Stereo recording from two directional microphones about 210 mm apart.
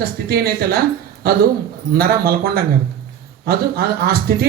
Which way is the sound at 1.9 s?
45° right (ahead or behind).